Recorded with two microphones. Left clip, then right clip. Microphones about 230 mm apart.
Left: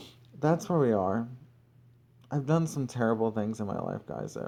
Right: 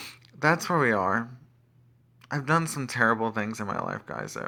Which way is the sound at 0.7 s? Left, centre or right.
Right.